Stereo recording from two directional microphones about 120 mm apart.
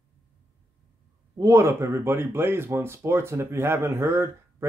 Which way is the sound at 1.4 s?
25° right (ahead or behind).